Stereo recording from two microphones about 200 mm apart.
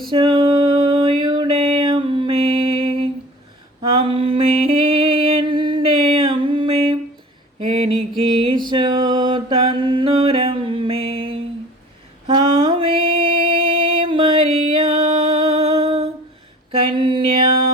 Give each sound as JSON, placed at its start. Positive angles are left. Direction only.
{"t": 0.1, "sound": "music", "side_deg": -25}
{"t": 7.6, "sound": "mantra", "side_deg": -25}
{"t": 12.3, "sound": "music", "side_deg": -25}
{"t": 16.7, "sound": "mantra", "side_deg": -25}